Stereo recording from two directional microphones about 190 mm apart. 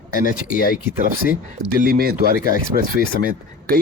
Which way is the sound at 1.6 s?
50° right (ahead or behind).